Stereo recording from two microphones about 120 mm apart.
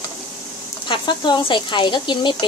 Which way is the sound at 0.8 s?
40° left (ahead or behind).